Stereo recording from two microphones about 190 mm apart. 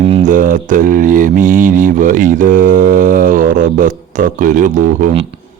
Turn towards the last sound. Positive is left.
turn(degrees=-45)  # may be behind; listen again after turning